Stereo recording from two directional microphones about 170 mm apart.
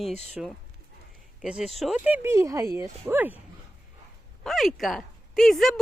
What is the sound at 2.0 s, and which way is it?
Speech, 15° right (ahead or behind).